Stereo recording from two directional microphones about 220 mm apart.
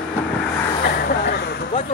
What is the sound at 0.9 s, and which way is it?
Vehicle, 45° left (ahead or behind).